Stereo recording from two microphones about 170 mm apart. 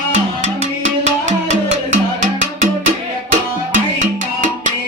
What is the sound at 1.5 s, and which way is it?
Music, 45° right (ahead or behind).